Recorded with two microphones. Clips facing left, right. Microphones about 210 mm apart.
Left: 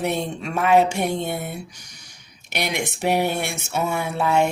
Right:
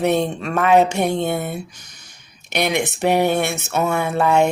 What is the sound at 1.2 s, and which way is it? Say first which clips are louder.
Speech: right 5 dB; 65° right (ahead or behind).